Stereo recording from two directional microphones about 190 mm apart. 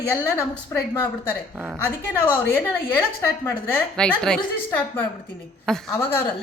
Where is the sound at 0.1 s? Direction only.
15° left (ahead or behind).